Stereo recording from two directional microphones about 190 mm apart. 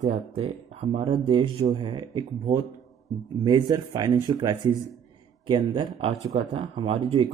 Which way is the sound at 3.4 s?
20° right (ahead or behind).